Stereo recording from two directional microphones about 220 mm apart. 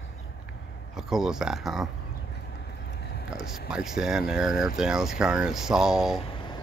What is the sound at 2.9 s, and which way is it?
Vehicle, 50° left (ahead or behind).